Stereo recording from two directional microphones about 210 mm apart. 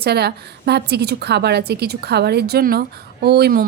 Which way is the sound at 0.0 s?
50° right (ahead or behind).